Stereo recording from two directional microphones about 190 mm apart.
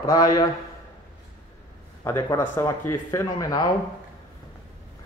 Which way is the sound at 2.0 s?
15° left (ahead or behind).